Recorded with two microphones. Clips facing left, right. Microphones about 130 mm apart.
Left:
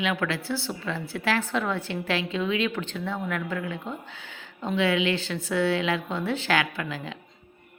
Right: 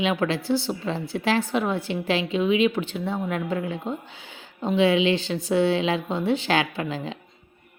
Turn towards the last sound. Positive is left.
turn(degrees=-25)  # may be behind; listen again after turning